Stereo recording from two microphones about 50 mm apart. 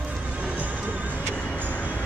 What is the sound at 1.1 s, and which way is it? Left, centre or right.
Music, left.